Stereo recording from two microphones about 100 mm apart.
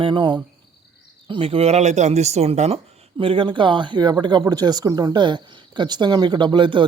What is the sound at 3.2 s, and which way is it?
Speech, 60° right (ahead or behind).